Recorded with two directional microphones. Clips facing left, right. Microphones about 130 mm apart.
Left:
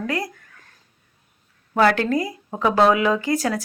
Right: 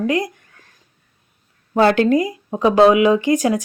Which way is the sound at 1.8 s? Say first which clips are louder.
Right 4 dB; 25° right (ahead or behind).